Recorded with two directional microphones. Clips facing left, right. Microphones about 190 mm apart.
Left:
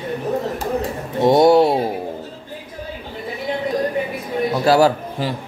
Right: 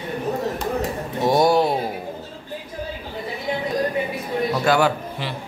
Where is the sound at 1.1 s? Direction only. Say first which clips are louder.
Left 5 dB; 25° left (ahead or behind).